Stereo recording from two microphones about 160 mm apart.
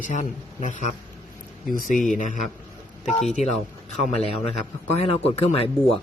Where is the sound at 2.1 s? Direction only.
55° left (ahead or behind).